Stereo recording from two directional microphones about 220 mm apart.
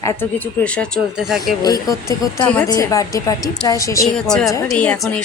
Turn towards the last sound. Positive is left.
turn(degrees=5)  # may be behind; listen again after turning